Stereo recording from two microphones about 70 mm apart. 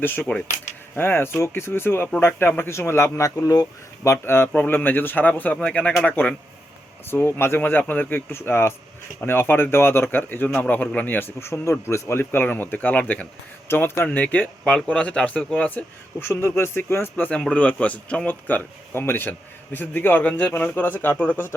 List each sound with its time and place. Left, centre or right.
0.0 s speech: left
4.1 s speech: left
7.1 s speech: left
11.3 s speech: left
13.7 s speech: left
14.6 s speech: centre
16.2 s speech: left
17.5 s speech: centre